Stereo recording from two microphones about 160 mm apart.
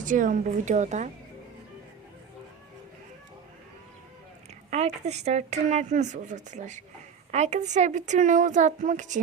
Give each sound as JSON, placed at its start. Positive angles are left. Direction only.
{"t": 0.0, "sound": "speech", "side_deg": -55}
{"t": 4.7, "sound": "speech", "side_deg": -45}